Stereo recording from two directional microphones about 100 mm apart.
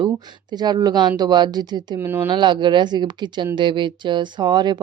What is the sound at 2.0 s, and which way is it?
Speech, 25° right (ahead or behind).